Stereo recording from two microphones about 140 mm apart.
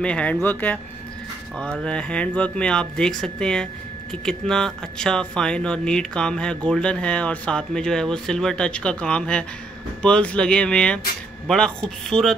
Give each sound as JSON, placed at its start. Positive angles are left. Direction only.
{"t": 0.0, "sound": "speech", "side_deg": 10}